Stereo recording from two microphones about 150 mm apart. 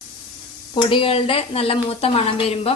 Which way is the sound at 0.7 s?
35° left (ahead or behind).